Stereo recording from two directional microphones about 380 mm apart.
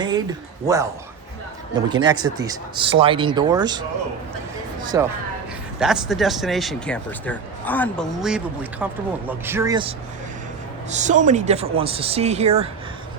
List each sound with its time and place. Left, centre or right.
0.0 s speech: centre
1.9 s a man's voice: centre